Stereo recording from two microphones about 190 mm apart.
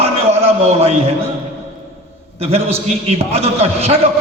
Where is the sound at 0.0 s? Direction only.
30° right (ahead or behind).